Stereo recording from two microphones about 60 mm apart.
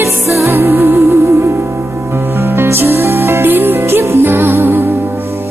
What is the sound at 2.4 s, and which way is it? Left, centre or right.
Music, right.